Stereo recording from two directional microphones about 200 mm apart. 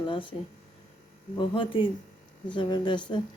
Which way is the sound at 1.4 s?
25° left (ahead or behind).